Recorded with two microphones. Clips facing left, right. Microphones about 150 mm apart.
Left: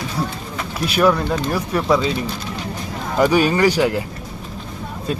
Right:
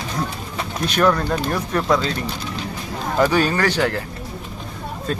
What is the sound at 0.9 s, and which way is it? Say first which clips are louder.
Speech: left 2 dB; 5° left (ahead or behind).